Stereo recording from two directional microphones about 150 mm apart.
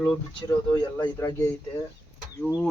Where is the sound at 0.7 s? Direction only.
25° left (ahead or behind).